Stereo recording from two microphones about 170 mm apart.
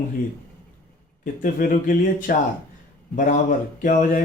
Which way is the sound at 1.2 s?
55° left (ahead or behind).